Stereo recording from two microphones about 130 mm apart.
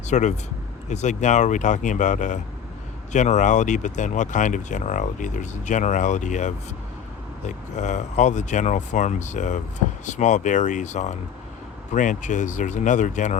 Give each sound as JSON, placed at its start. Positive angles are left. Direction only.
{"t": 0.1, "sound": "speech", "side_deg": 65}